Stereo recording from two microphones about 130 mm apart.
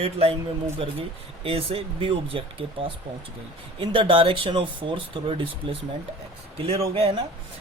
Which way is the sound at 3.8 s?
45° right (ahead or behind).